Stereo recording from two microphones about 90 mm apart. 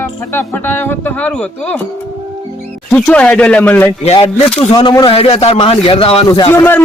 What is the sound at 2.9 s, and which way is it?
Speech, 15° left (ahead or behind).